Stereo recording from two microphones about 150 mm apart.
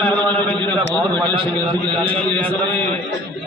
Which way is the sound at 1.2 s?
35° right (ahead or behind).